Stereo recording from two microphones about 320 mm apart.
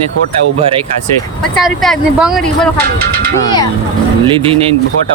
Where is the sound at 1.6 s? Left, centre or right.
Centre.